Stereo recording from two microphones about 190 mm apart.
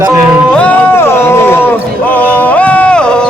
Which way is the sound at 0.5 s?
10° left (ahead or behind).